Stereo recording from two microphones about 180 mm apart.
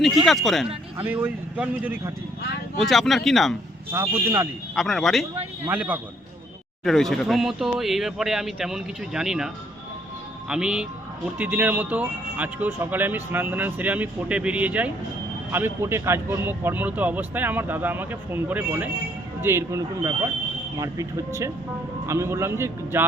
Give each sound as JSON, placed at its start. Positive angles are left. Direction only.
{"t": 0.3, "sound": "speech", "side_deg": 0}
{"t": 1.0, "sound": "speech", "side_deg": -10}
{"t": 2.7, "sound": "speech", "side_deg": 0}
{"t": 3.9, "sound": "speech", "side_deg": -15}
{"t": 4.7, "sound": "speech", "side_deg": 0}
{"t": 6.8, "sound": "speech", "side_deg": 0}
{"t": 10.5, "sound": "speech", "side_deg": -5}